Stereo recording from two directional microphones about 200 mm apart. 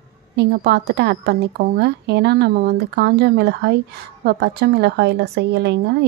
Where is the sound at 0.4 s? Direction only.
55° right (ahead or behind).